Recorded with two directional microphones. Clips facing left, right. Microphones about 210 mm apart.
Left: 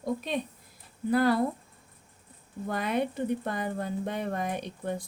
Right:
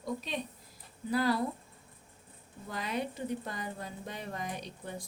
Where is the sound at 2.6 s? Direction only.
55° left (ahead or behind).